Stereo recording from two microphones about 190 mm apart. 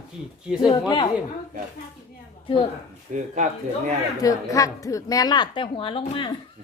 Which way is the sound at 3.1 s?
40° right (ahead or behind).